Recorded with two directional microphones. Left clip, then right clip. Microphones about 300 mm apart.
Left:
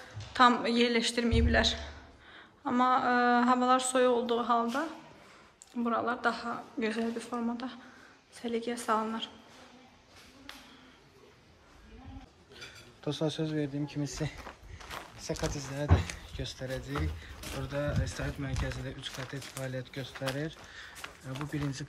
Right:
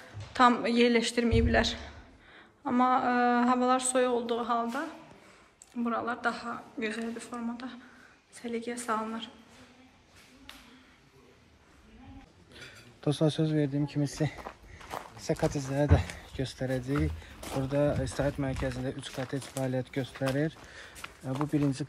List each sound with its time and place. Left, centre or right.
0.3 s speech: centre
12.5 s speech: right